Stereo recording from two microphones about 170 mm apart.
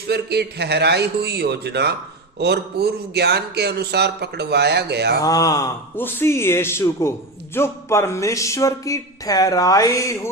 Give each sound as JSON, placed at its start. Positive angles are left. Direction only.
{"t": 0.1, "sound": "speech", "side_deg": -75}
{"t": 5.2, "sound": "speech", "side_deg": 20}